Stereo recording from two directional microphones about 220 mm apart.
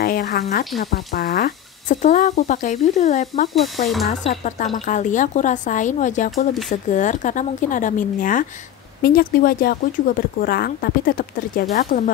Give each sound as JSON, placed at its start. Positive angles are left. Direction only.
{"t": 0.0, "sound": "speech", "side_deg": 45}
{"t": 3.5, "sound": "speech", "side_deg": 0}
{"t": 4.3, "sound": "speech", "side_deg": 35}